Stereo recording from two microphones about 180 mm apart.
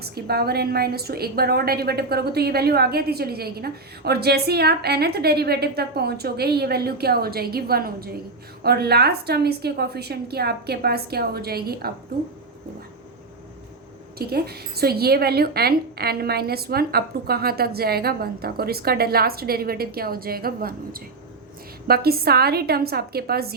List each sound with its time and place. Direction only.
0.0 s a woman's voice: 60° right (ahead or behind)
14.2 s a woman's voice: 60° right (ahead or behind)